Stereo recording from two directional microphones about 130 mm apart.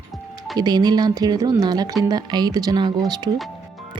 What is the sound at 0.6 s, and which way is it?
Speech, 30° right (ahead or behind).